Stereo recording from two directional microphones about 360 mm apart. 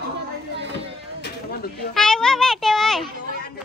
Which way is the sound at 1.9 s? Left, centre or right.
Centre.